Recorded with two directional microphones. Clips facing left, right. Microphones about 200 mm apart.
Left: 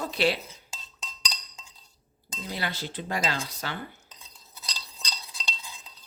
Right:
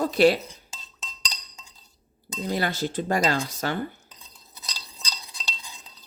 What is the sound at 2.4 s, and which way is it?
Speech, 45° right (ahead or behind).